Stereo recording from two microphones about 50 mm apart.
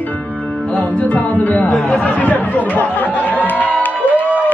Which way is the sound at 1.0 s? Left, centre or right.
Left.